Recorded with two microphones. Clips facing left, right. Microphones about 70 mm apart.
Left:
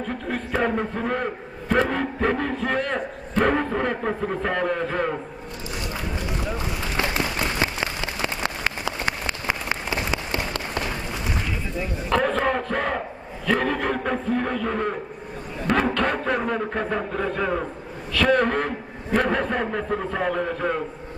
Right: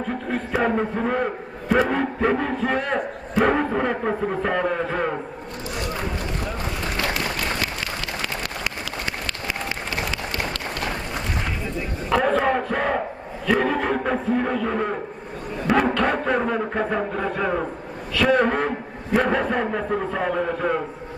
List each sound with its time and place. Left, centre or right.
0.3 s a man's voice: centre
6.9 s applause: left
12.0 s a man's voice: centre